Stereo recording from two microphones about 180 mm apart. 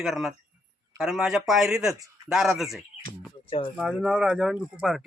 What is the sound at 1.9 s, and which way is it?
Speech, 20° right (ahead or behind).